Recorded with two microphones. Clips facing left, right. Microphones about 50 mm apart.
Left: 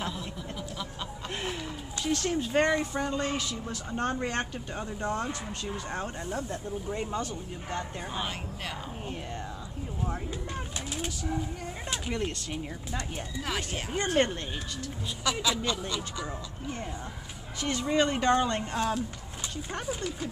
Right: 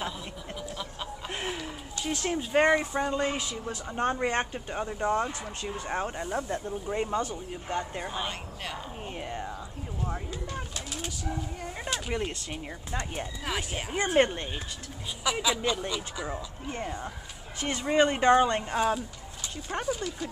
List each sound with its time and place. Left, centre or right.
1.3 s a sound: centre
2.0 s a woman's voice: centre
8.1 s speech: centre
10.0 s speech: centre
12.1 s speech: centre
12.9 s a woman's voice: right
13.5 s speech: centre
17.6 s a woman's voice: right
19.9 s speech: centre